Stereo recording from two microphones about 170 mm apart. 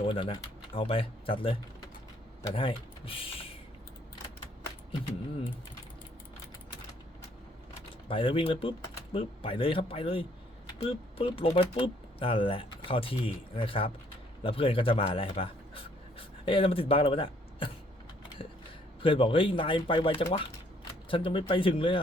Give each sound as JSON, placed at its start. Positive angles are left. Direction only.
{"t": 0.0, "sound": "speech", "side_deg": 30}
{"t": 8.0, "sound": "speech", "side_deg": 30}